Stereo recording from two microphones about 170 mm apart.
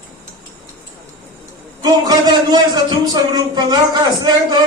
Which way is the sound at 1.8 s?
25° right (ahead or behind).